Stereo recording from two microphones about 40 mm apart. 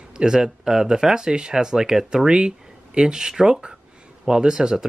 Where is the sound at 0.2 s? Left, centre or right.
Centre.